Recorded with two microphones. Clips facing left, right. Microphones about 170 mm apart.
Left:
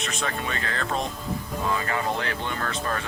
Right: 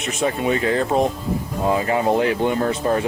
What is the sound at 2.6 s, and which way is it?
Speech, 25° right (ahead or behind).